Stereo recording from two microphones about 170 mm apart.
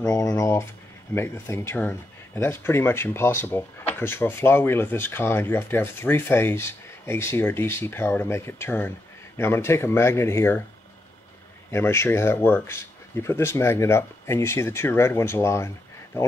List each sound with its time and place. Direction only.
0.1 s speech: 20° left (ahead or behind)
11.7 s speech: 15° left (ahead or behind)